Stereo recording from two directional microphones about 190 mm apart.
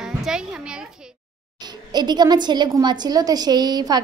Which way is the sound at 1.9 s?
20° right (ahead or behind).